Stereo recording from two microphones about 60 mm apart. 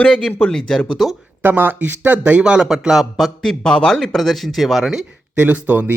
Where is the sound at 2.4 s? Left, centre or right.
Centre.